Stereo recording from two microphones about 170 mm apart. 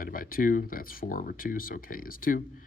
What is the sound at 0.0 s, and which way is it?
Speech, 55° left (ahead or behind).